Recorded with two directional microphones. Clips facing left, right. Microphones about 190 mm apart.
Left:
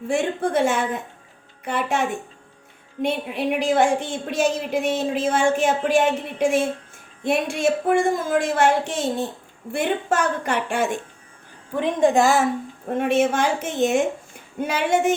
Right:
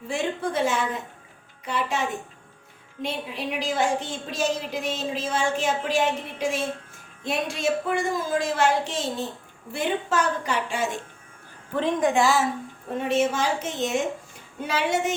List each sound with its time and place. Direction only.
0.1 s a woman's voice: 50° left (ahead or behind)
12.1 s a woman's voice: 50° left (ahead or behind)